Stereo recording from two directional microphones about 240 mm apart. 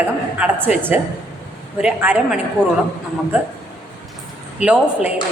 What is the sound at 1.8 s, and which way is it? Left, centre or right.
Speech, centre.